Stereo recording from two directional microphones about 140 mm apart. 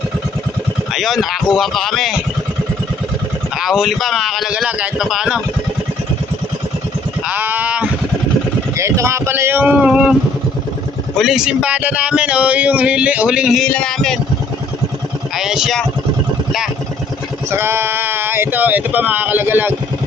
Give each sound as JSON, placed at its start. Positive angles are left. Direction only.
{"t": 0.9, "sound": "a man's voice", "side_deg": 0}
{"t": 3.6, "sound": "a man's voice", "side_deg": 0}
{"t": 7.3, "sound": "sheep", "side_deg": -10}
{"t": 8.7, "sound": "a man's voice", "side_deg": -20}
{"t": 11.2, "sound": "a man's voice", "side_deg": -5}
{"t": 13.7, "sound": "a man's voice", "side_deg": 5}
{"t": 15.4, "sound": "a man's voice", "side_deg": -5}
{"t": 17.5, "sound": "a man's voice", "side_deg": -15}